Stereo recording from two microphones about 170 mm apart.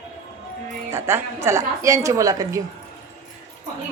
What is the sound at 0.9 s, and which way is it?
A woman's voice, 15° right (ahead or behind).